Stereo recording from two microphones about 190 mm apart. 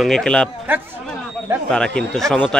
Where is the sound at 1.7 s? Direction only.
5° left (ahead or behind).